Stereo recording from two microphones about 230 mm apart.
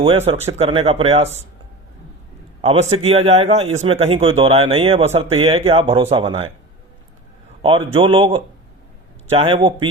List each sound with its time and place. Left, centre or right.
0.0 s speech: right
2.6 s a man's voice: right
7.9 s speech: right